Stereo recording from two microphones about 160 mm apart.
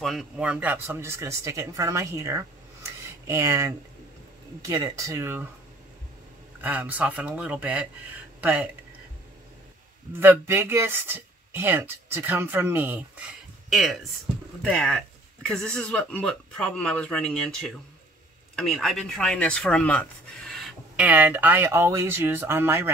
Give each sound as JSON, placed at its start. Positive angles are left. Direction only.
{"t": 0.0, "sound": "speech", "side_deg": 0}
{"t": 6.6, "sound": "speech", "side_deg": -10}
{"t": 10.2, "sound": "speech", "side_deg": -15}